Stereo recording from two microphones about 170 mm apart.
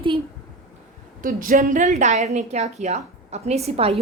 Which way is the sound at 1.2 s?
55° right (ahead or behind).